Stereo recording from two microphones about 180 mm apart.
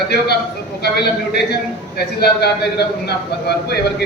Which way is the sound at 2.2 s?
65° left (ahead or behind).